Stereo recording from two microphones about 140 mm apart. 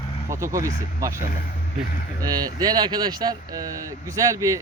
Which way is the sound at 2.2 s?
30° right (ahead or behind).